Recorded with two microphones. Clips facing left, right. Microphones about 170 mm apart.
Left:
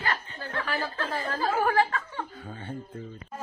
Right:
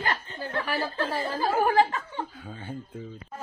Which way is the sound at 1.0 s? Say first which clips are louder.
Right 2 dB; 35° right (ahead or behind).